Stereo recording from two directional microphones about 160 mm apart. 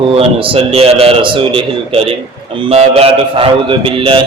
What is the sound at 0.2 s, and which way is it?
A man's voice, 35° right (ahead or behind).